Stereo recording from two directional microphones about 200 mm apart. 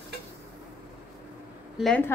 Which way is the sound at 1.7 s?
5° left (ahead or behind).